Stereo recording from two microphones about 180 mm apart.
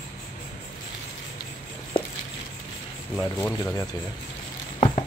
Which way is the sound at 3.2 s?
15° left (ahead or behind).